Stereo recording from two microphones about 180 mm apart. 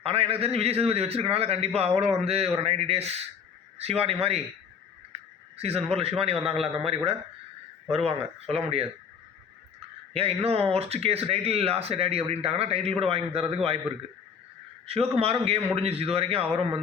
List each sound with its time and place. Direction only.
0.0 s speech: 35° right (ahead or behind)
5.5 s speech: 35° right (ahead or behind)
10.2 s speech: 35° right (ahead or behind)
14.8 s speech: 35° right (ahead or behind)